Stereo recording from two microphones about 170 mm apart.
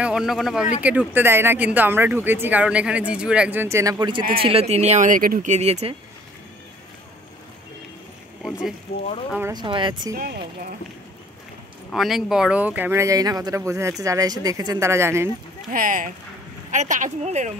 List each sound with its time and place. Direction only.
0.0 s speech: 5° right (ahead or behind); by 4.2 s 25° right (ahead or behind)
4.4 s speech: 35° right (ahead or behind)
9.5 s speech: 25° right (ahead or behind)
10.1 s speech: 65° right (ahead or behind)
11.9 s speech: centre (ahead or behind)
15.7 s speech: 55° right (ahead or behind)